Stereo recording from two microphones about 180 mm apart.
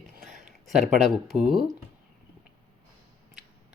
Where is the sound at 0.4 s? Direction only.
45° right (ahead or behind).